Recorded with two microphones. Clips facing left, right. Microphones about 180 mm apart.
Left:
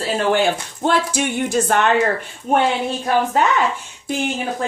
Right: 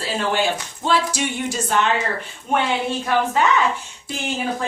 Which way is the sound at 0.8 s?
50° left (ahead or behind).